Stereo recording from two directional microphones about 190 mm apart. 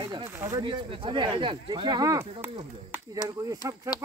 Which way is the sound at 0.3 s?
15° right (ahead or behind).